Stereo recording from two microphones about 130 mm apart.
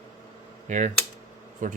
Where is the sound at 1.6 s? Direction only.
80° right.